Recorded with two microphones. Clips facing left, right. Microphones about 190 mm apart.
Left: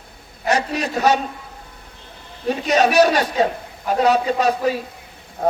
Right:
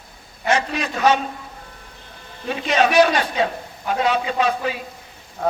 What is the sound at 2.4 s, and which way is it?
A man's voice, 40° left (ahead or behind).